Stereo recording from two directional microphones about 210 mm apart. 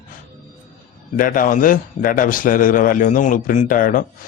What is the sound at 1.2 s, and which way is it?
A man's voice, 40° left (ahead or behind).